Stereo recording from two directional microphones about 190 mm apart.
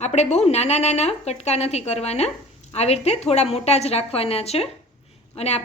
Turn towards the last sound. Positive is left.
turn(degrees=35)  # may be behind; listen again after turning